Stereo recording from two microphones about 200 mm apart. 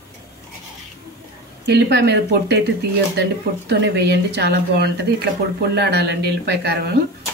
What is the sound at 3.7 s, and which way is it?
Speech, 60° right (ahead or behind).